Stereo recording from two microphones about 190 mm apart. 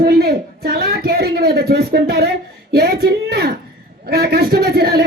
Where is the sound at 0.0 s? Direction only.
55° right (ahead or behind).